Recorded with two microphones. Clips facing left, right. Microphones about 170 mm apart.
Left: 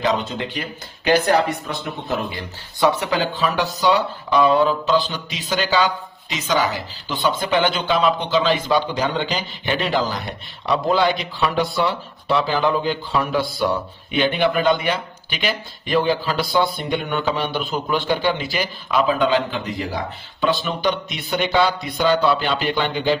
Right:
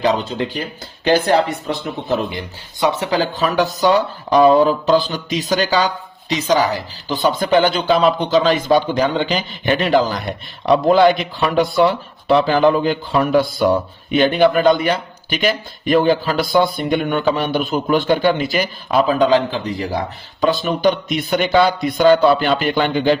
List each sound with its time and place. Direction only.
0.0 s speech: 35° right (ahead or behind); by 23.1 s 50° right (ahead or behind)